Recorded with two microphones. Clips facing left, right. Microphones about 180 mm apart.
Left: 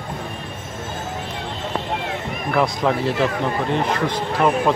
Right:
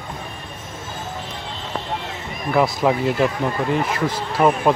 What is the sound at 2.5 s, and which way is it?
A man's voice, 5° right (ahead or behind).